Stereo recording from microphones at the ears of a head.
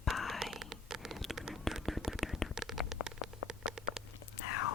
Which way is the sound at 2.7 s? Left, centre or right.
Left.